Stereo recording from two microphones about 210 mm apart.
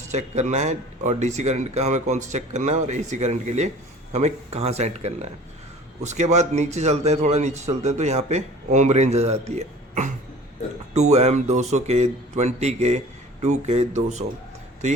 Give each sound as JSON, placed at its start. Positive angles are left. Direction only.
{"t": 0.1, "sound": "a man's voice", "side_deg": -35}